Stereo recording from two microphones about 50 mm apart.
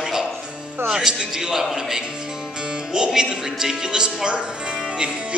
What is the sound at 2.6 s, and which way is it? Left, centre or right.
Music, centre.